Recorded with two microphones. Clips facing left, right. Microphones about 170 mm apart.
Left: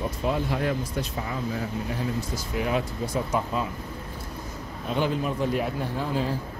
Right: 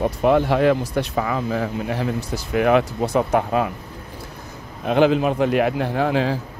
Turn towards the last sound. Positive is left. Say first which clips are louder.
# right 7 dB
turn(degrees=-90)